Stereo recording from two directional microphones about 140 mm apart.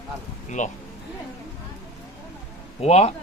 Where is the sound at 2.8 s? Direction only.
50° left (ahead or behind).